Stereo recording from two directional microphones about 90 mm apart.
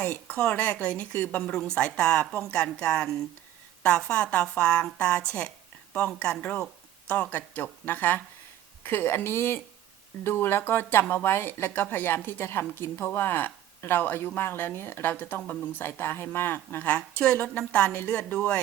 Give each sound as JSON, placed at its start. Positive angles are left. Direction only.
{"t": 0.0, "sound": "a woman's voice", "side_deg": 15}